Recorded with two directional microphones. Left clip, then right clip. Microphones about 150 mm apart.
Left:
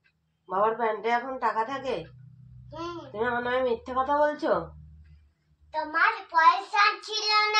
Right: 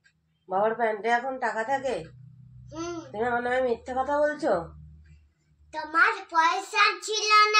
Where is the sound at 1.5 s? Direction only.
15° left (ahead or behind).